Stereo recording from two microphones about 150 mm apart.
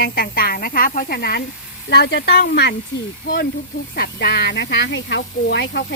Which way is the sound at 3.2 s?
75° left (ahead or behind).